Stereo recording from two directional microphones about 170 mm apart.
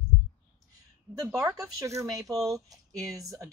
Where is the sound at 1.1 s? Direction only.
20° right (ahead or behind).